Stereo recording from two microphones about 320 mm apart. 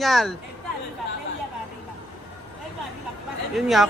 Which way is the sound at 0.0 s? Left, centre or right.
Centre.